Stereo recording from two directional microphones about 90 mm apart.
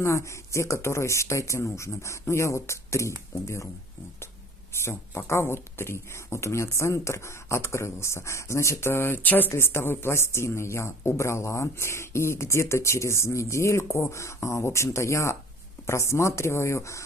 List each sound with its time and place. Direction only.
0.0 s speech: 35° left (ahead or behind)
4.8 s speech: 30° left (ahead or behind)